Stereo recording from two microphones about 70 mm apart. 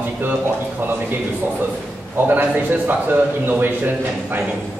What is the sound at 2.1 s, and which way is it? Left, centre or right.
A man's voice, right.